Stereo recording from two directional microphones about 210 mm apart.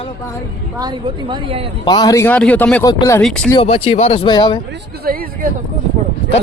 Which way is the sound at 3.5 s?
25° left (ahead or behind).